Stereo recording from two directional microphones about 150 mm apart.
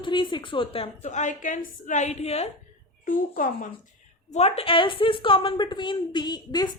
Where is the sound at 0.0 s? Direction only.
35° left (ahead or behind).